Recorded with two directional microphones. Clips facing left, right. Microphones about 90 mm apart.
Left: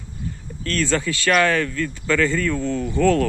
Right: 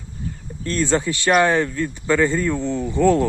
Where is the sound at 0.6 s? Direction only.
20° right (ahead or behind).